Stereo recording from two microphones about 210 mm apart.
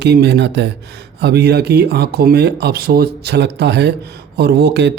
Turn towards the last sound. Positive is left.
turn(degrees=-55)  # may be behind; listen again after turning